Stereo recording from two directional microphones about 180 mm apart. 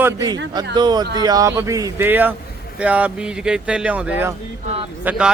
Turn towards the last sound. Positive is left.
turn(degrees=-10)  # may be behind; listen again after turning